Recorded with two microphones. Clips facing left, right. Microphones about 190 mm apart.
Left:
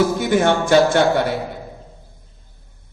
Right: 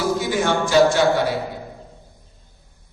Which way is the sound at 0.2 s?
55° left (ahead or behind).